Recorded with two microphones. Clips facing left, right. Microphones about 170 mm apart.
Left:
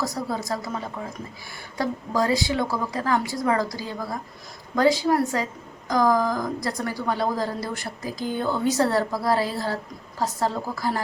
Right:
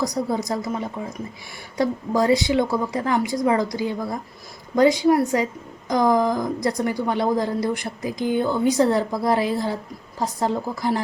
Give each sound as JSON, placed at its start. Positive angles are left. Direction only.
{"t": 0.0, "sound": "a woman's voice", "side_deg": -20}
{"t": 1.8, "sound": "a woman's voice", "side_deg": -25}